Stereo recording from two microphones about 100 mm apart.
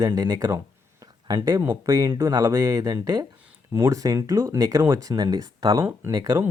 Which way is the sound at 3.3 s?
15° right (ahead or behind).